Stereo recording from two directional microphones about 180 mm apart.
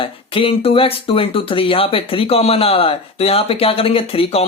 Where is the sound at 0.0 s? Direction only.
30° left (ahead or behind).